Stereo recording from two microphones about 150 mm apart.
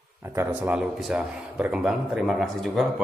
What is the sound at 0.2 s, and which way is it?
A man's voice, 20° right (ahead or behind).